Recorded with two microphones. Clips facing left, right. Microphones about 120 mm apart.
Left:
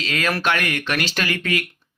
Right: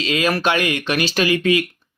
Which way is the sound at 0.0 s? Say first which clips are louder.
Right 4 dB; 15° right (ahead or behind).